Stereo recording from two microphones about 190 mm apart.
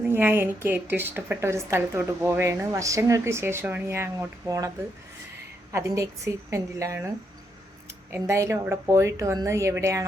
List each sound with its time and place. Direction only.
0.0 s a woman's voice: 10° right (ahead or behind)
5.7 s a woman's voice: 15° right (ahead or behind)
8.1 s a woman's voice: 15° right (ahead or behind)